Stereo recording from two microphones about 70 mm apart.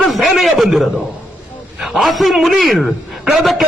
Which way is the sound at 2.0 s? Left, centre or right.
Centre.